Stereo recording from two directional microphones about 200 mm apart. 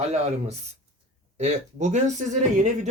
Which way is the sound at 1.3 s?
35° right (ahead or behind).